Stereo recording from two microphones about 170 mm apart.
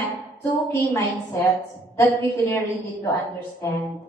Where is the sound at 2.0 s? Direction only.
15° left (ahead or behind).